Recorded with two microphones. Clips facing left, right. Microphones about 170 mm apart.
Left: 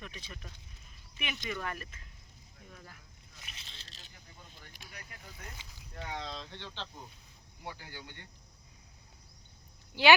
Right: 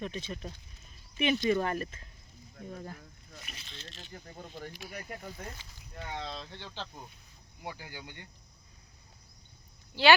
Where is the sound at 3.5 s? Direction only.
30° left (ahead or behind).